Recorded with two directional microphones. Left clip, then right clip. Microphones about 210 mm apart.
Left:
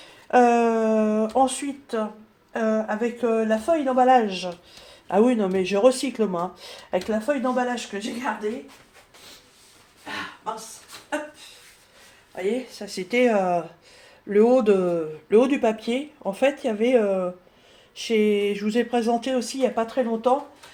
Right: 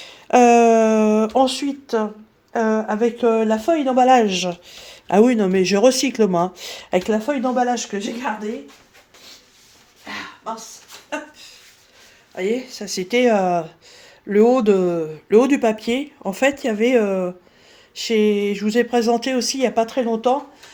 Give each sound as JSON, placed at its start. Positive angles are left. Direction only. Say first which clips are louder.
{"t": 0.0, "sound": "a sound", "louder": "right 4 dB", "side_deg": -55}
{"t": 2.5, "sound": "speech", "louder": "right 4 dB", "side_deg": -55}
{"t": 12.3, "sound": "speech", "louder": "right 4 dB", "side_deg": -55}